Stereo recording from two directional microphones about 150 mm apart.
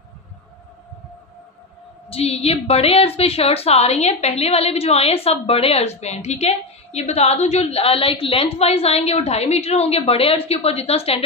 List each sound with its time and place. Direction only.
2.0 s a woman's voice: 40° left (ahead or behind)